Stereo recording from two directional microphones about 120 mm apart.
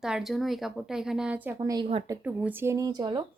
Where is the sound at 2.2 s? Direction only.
15° right (ahead or behind); by 3.2 s 40° right (ahead or behind).